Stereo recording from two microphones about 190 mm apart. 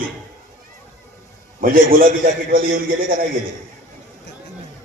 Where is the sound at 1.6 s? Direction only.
45° right (ahead or behind).